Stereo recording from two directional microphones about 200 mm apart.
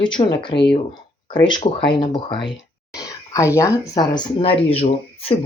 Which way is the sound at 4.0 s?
20° left (ahead or behind).